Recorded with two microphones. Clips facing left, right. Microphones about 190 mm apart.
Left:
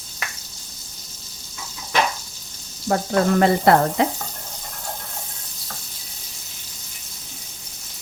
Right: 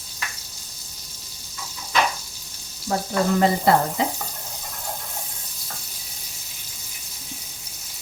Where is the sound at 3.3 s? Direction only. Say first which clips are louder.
Left 2 dB; 65° left (ahead or behind).